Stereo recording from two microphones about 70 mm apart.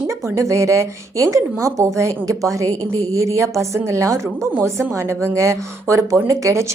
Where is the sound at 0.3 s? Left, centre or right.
Right.